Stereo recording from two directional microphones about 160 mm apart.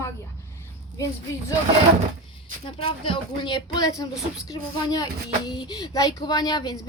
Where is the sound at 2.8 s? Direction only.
35° left (ahead or behind).